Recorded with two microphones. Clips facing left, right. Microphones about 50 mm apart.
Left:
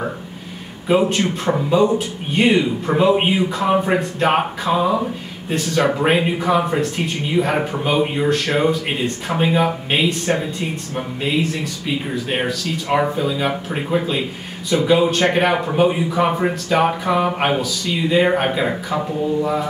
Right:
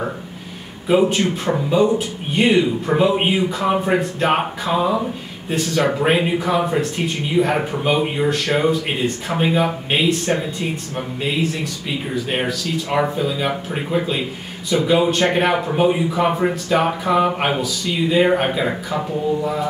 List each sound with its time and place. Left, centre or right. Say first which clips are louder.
0.8 s speech: right 1 dB; centre
12.3 s speech: left 1 dB; centre